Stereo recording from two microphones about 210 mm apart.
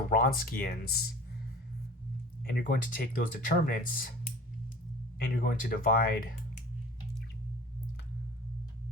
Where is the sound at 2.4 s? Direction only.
45° left (ahead or behind).